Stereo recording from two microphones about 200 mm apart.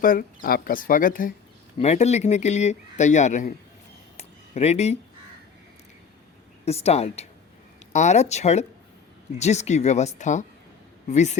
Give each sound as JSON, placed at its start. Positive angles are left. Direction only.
{"t": 0.0, "sound": "speech", "side_deg": 45}
{"t": 4.2, "sound": "a sound", "side_deg": 35}
{"t": 6.7, "sound": "speech", "side_deg": 30}